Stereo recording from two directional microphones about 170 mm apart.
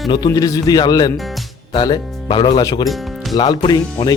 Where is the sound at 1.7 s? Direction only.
25° left (ahead or behind).